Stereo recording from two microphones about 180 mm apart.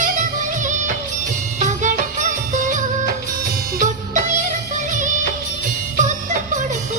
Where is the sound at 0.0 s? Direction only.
45° right (ahead or behind).